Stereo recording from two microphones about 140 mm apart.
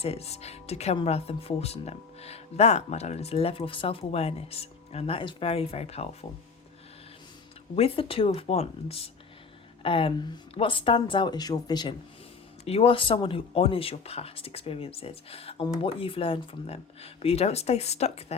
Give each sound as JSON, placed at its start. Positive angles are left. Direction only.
{"t": 0.0, "sound": "speech", "side_deg": 45}
{"t": 7.8, "sound": "speech", "side_deg": 40}
{"t": 12.6, "sound": "speech", "side_deg": 45}